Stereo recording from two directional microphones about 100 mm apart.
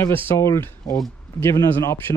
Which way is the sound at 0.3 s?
25° left (ahead or behind).